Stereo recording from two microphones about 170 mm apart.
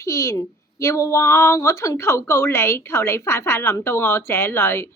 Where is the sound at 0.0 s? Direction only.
20° left (ahead or behind).